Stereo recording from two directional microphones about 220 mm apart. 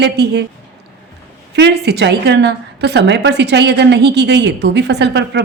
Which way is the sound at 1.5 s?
50° right (ahead or behind).